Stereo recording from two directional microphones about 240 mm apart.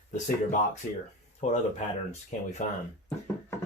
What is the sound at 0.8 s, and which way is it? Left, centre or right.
Speech, left.